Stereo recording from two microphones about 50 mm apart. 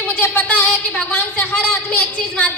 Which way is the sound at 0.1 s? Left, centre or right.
Left.